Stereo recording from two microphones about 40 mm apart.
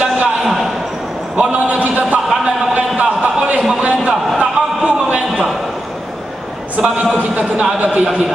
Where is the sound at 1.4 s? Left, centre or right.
Right.